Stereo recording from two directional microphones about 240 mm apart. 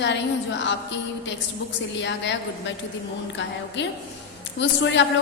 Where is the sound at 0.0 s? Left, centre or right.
Left.